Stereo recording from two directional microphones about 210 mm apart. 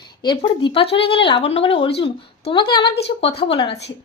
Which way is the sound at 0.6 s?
25° left (ahead or behind).